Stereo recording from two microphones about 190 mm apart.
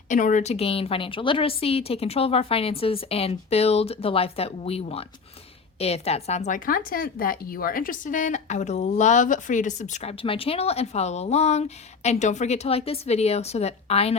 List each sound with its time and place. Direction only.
0.1 s speech: 40° left (ahead or behind)